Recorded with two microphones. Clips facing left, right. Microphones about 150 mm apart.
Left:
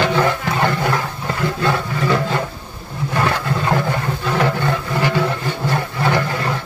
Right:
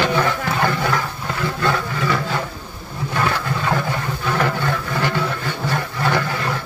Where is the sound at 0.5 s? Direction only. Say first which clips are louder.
Left 1 dB; 15° left (ahead or behind).